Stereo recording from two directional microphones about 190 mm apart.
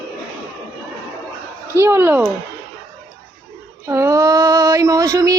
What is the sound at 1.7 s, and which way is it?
Speech, 15° right (ahead or behind).